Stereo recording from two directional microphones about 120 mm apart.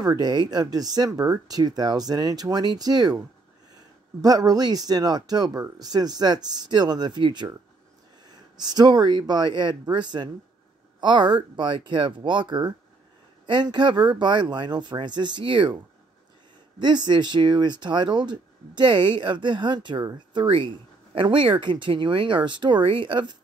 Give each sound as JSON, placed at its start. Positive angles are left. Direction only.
{"t": 0.0, "sound": "speech", "side_deg": -35}
{"t": 16.8, "sound": "speech", "side_deg": -40}